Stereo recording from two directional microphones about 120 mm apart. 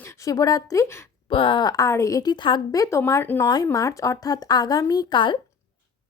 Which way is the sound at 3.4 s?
35° left (ahead or behind).